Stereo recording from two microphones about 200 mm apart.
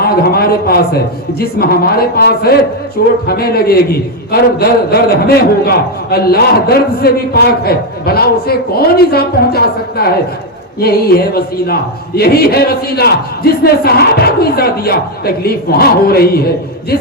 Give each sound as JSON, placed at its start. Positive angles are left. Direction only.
{"t": 0.0, "sound": "a man's voice", "side_deg": 50}